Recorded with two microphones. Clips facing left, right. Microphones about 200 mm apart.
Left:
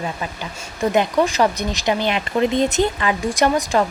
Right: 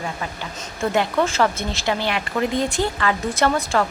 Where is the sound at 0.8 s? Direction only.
15° left (ahead or behind).